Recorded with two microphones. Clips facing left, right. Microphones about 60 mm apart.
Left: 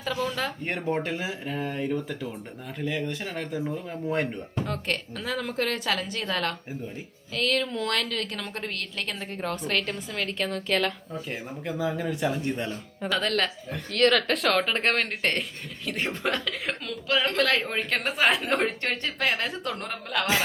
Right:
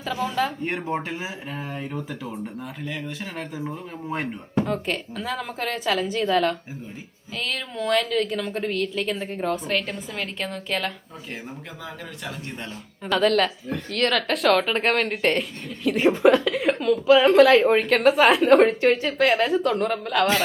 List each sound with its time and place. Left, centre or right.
0.0 s speech: centre
11.8 s speech: centre